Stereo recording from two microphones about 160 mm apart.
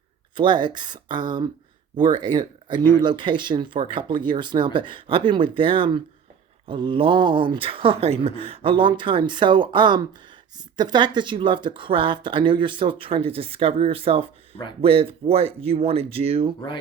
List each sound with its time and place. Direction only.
0.3 s speech: 30° right (ahead or behind)